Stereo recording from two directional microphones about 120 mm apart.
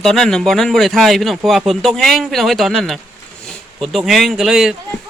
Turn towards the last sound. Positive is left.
turn(degrees=0)  # may be behind; listen again after turning